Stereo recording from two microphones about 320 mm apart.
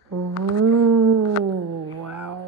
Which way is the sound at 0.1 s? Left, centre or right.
Right.